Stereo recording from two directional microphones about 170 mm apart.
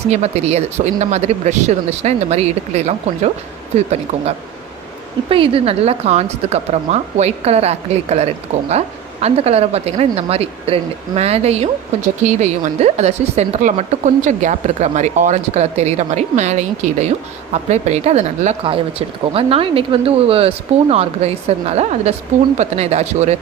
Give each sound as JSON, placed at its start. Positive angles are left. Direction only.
{"t": 0.1, "sound": "speech", "side_deg": -40}
{"t": 5.3, "sound": "speech", "side_deg": -30}